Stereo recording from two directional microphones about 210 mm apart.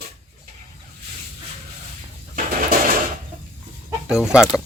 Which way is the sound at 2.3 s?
40° right (ahead or behind).